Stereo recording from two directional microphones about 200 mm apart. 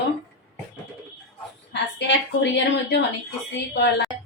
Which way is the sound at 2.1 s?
60° left (ahead or behind).